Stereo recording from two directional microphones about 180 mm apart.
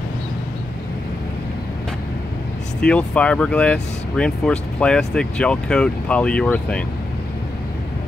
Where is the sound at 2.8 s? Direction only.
5° left (ahead or behind).